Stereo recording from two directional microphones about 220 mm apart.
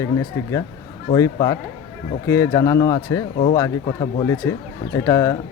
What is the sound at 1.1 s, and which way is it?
A woman's voice, 15° left (ahead or behind).